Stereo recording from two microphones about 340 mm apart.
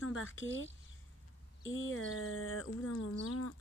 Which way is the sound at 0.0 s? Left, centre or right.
Left.